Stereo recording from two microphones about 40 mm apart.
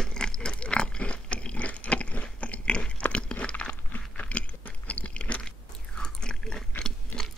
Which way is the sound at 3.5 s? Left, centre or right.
Left.